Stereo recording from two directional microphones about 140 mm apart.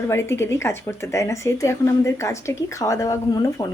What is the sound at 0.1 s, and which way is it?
Speech, 20° left (ahead or behind).